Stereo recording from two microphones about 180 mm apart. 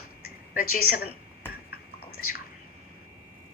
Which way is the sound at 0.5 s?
55° left (ahead or behind).